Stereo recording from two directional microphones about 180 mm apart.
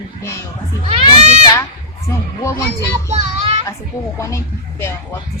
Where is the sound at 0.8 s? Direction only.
35° right (ahead or behind).